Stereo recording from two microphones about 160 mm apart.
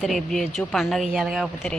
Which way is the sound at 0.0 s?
Centre (ahead or behind).